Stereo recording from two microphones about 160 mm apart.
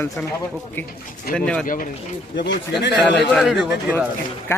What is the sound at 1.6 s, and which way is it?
Speech, 55° left (ahead or behind).